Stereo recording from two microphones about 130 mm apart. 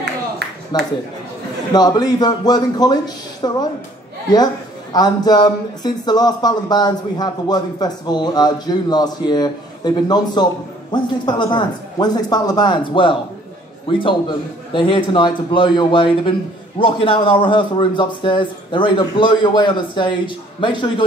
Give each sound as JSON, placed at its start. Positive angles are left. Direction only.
{"t": 0.7, "sound": "speech", "side_deg": 30}
{"t": 4.9, "sound": "speech", "side_deg": 30}